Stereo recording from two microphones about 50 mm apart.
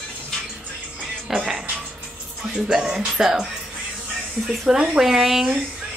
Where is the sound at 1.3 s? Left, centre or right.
Centre.